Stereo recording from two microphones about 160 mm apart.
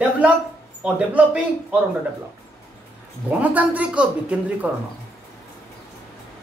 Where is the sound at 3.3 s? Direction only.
10° right (ahead or behind).